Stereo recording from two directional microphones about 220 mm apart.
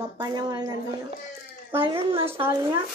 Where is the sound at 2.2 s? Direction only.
10° right (ahead or behind).